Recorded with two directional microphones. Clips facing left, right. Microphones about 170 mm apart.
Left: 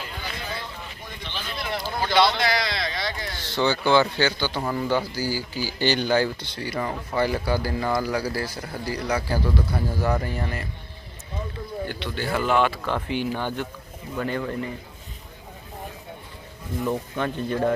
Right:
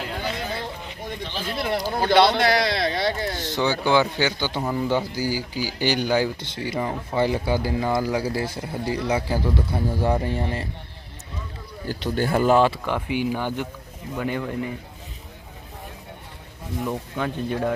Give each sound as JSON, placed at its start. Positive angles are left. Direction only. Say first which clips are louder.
{"t": 1.2, "sound": "speech", "louder": "right 5 dB", "side_deg": -35}
{"t": 2.0, "sound": "a man's voice", "louder": "right 3 dB", "side_deg": -55}
{"t": 3.4, "sound": "speech", "louder": "left 1 dB", "side_deg": -15}
{"t": 11.9, "sound": "a man's voice", "louder": "right 8 dB", "side_deg": -40}
{"t": 12.8, "sound": "speech", "louder": "right 1 dB", "side_deg": -15}
{"t": 16.8, "sound": "speech", "louder": "left 1 dB", "side_deg": -5}